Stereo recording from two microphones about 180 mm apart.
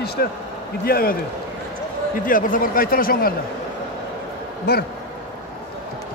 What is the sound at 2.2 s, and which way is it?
A man's voice, 50° left (ahead or behind).